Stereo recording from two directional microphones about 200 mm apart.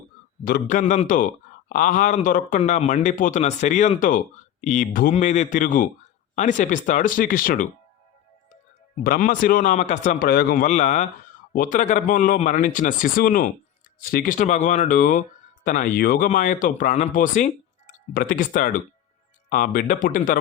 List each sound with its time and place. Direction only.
0.4 s a man's voice: 45° left (ahead or behind)
9.0 s a man's voice: 40° left (ahead or behind)